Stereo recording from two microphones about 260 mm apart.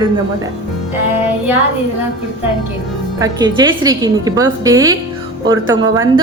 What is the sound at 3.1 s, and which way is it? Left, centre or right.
A woman's voice, centre.